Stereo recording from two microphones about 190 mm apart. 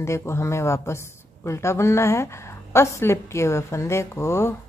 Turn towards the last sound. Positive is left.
turn(degrees=15)  # may be behind; listen again after turning